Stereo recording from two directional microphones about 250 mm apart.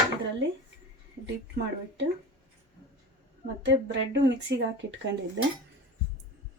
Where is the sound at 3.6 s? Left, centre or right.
Right.